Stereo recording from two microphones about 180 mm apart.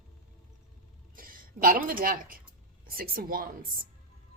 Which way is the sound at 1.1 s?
50° right (ahead or behind).